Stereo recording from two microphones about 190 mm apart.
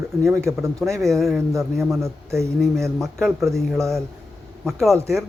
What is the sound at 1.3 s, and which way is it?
A man's voice, 15° right (ahead or behind).